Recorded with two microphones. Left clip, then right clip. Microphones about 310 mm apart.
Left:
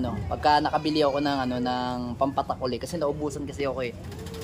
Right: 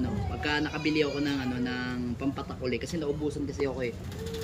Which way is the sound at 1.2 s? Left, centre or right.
Centre.